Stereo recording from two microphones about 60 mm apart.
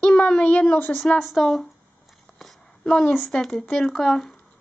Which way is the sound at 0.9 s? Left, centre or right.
Centre.